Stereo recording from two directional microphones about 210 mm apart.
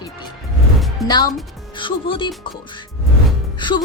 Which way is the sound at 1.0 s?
20° left (ahead or behind).